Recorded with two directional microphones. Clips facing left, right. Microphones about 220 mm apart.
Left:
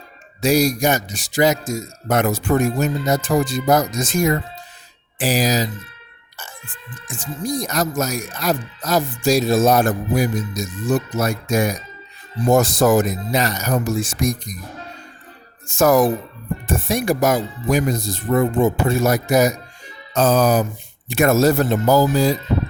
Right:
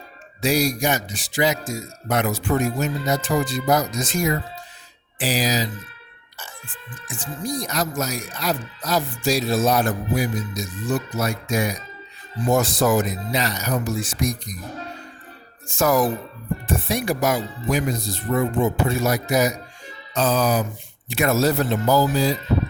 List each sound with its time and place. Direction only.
0.4 s speech: 45° left (ahead or behind)
15.6 s speech: 45° left (ahead or behind)